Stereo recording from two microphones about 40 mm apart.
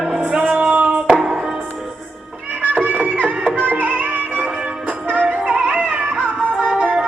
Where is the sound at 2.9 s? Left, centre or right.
Right.